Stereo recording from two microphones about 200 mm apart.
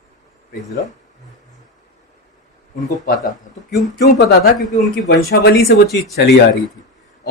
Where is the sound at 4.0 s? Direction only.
55° left (ahead or behind).